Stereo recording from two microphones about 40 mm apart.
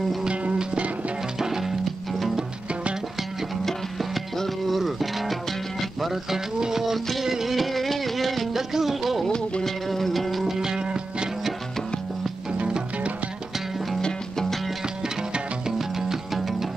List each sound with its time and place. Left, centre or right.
0.3 s music: right
1.4 s music: centre
2.3 s music: right
3.6 s music: centre
9.3 s music: centre
9.8 s music: centre; by 11.2 s right
16.1 s music: centre